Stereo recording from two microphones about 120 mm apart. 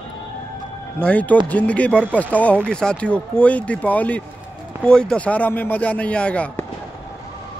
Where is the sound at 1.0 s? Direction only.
10° left (ahead or behind).